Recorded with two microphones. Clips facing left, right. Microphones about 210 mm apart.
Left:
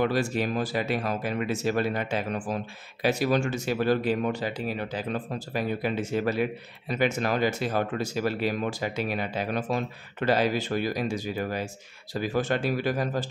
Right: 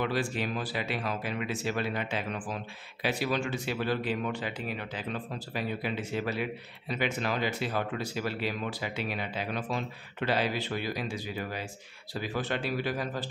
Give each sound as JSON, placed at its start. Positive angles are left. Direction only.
{"t": 0.0, "sound": "speech", "side_deg": 45}